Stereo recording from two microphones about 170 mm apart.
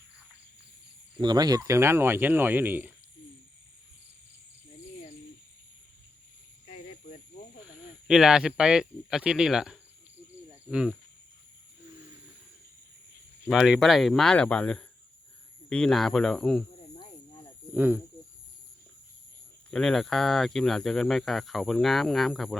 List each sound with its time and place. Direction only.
1.2 s speech: 25° right (ahead or behind)
6.8 s cricket: 40° left (ahead or behind)
7.6 s speech: 5° right (ahead or behind)
13.5 s speech: centre (ahead or behind)
17.7 s speech: 10° right (ahead or behind)
19.7 s speech: 5° left (ahead or behind)